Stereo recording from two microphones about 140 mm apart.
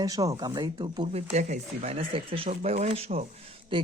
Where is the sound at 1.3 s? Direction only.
55° right (ahead or behind); by 3.9 s 35° right (ahead or behind).